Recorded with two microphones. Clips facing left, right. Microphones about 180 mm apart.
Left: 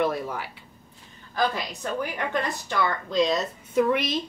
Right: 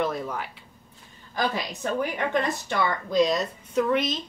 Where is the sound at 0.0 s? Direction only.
10° left (ahead or behind).